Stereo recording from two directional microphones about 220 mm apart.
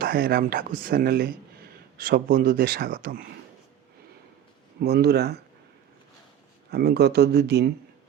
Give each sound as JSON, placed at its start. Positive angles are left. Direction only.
{"t": 0.0, "sound": "speech", "side_deg": -40}
{"t": 4.8, "sound": "speech", "side_deg": -45}
{"t": 6.7, "sound": "speech", "side_deg": -45}